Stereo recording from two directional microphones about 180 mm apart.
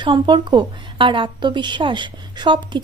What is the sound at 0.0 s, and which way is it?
A woman's voice, 25° right (ahead or behind).